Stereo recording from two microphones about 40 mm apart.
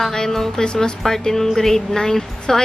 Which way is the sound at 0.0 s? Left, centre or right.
Centre.